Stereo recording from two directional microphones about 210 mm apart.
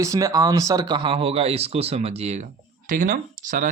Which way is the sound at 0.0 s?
15° right (ahead or behind).